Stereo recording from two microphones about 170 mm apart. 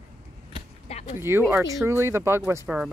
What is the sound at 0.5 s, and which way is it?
Basketball bounce, 40° left (ahead or behind).